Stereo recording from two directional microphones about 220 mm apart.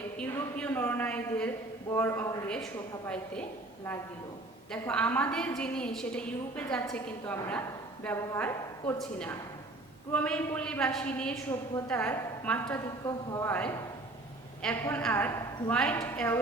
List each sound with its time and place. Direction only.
0.2 s a woman's voice: 5° left (ahead or behind)
4.7 s a woman's voice: 5° left (ahead or behind)